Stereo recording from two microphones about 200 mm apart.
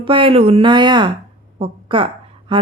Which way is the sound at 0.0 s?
25° right (ahead or behind).